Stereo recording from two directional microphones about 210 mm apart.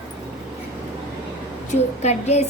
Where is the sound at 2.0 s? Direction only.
30° left (ahead or behind).